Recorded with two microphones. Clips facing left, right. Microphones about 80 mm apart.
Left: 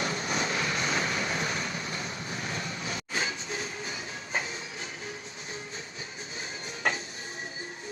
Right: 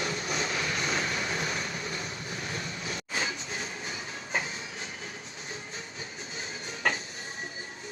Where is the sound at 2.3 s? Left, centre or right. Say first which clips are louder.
Left 1 dB; left.